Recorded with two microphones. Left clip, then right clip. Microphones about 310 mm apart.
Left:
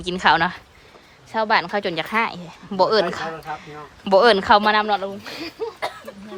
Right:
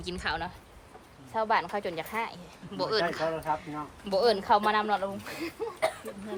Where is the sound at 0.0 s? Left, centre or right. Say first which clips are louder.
Left 16 dB; centre.